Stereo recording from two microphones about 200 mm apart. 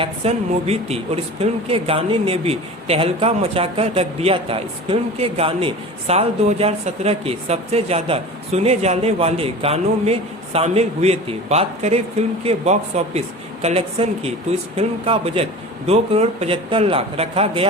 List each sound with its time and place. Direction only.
0.0 s a woman's voice: 30° right (ahead or behind)